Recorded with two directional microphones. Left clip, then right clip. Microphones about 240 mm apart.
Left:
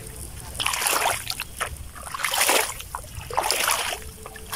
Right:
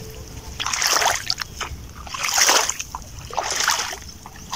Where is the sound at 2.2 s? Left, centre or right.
Centre.